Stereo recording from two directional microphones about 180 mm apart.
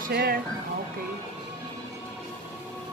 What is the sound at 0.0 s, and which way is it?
Speech, 55° right (ahead or behind).